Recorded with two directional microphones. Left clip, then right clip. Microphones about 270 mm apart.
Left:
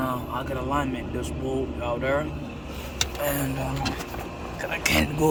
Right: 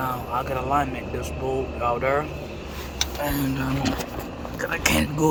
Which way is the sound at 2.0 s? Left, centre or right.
Centre.